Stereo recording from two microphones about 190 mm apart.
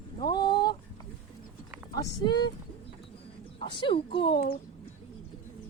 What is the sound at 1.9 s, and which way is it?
Speech, 20° left (ahead or behind).